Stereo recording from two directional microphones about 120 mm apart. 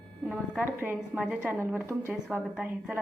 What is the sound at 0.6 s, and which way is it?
A woman's voice, 15° right (ahead or behind).